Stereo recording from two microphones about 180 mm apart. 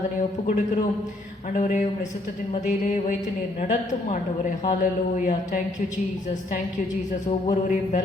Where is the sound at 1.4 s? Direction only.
45° left (ahead or behind).